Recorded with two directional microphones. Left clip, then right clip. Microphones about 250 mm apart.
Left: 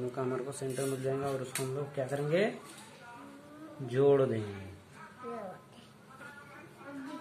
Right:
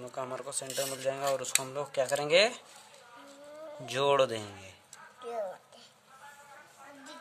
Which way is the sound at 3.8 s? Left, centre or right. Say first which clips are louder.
Even; right.